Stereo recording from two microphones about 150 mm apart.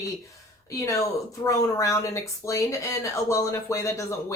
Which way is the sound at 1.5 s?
20° left (ahead or behind).